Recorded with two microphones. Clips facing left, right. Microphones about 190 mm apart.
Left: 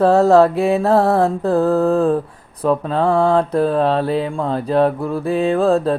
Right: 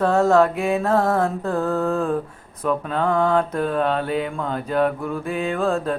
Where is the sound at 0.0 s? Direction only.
35° left (ahead or behind).